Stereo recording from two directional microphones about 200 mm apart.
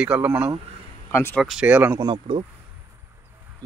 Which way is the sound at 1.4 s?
5° right (ahead or behind).